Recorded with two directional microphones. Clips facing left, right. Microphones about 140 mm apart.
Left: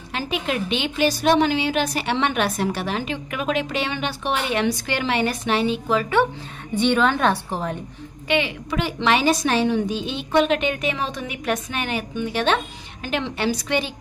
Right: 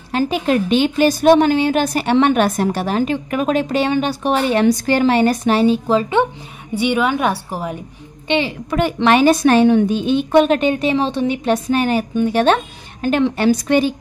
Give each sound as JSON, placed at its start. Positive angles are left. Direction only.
{"t": 0.1, "sound": "a woman's voice", "side_deg": -40}
{"t": 6.7, "sound": "a woman's voice", "side_deg": -10}
{"t": 8.3, "sound": "a woman's voice", "side_deg": -30}
{"t": 8.6, "sound": "a woman's voice", "side_deg": -50}